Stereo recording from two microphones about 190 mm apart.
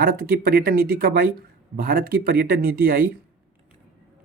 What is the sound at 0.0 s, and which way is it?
Speech, 50° right (ahead or behind).